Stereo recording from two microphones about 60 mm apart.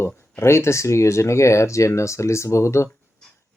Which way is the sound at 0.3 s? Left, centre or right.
Left.